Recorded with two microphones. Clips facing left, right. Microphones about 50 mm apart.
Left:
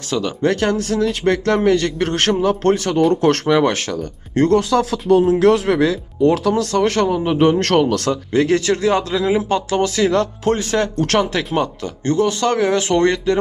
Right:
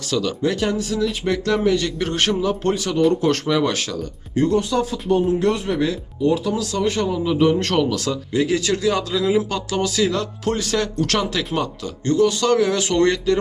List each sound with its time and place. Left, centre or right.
0.1 s speech: left
0.4 s a man's voice: left
4.4 s speech: left
6.6 s speech: left
7.1 s a man's voice: left
8.6 s speech: left